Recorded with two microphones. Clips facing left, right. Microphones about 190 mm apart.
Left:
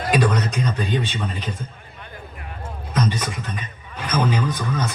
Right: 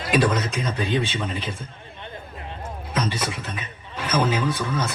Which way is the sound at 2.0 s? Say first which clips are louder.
Right 2 dB; 25° right (ahead or behind).